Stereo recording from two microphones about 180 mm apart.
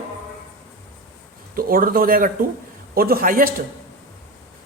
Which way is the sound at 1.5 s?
55° right (ahead or behind).